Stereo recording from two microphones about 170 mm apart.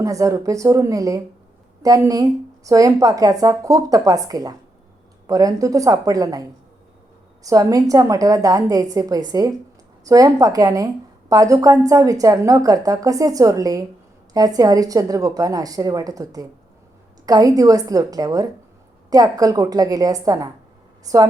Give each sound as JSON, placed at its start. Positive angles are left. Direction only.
{"t": 0.0, "sound": "a woman's voice", "side_deg": -20}
{"t": 7.4, "sound": "a woman's voice", "side_deg": -20}